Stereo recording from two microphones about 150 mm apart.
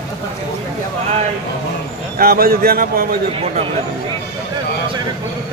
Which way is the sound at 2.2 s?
90° right.